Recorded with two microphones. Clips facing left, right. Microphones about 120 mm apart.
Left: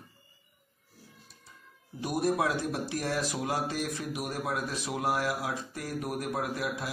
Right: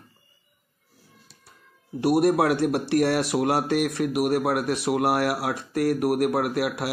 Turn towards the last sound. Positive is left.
turn(degrees=-70)  # may be behind; listen again after turning